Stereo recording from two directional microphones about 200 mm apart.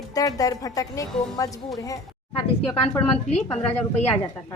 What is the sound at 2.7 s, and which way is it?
Speech, 25° left (ahead or behind).